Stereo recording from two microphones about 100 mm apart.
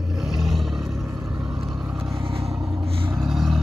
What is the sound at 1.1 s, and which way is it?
Vehicle, 30° right (ahead or behind).